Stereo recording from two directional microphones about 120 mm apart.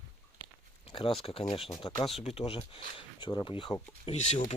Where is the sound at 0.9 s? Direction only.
45° left (ahead or behind).